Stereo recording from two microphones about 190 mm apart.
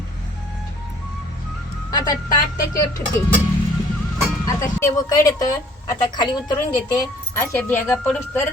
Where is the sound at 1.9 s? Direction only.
20° left (ahead or behind).